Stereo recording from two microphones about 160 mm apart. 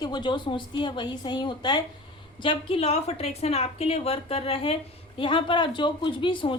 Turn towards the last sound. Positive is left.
turn(degrees=30)  # may be behind; listen again after turning